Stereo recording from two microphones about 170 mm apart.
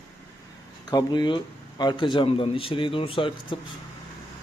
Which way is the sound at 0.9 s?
25° left (ahead or behind).